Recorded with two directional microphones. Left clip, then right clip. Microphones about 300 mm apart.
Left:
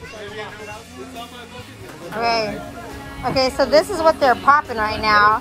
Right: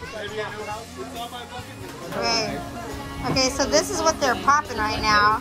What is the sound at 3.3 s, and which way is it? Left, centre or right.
Speech, centre.